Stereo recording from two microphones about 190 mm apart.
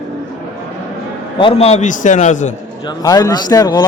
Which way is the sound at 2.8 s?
20° left (ahead or behind).